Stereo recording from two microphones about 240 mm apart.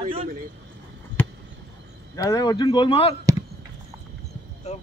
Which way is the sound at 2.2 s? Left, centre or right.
Centre.